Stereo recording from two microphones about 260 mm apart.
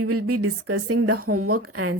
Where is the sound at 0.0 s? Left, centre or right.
Right.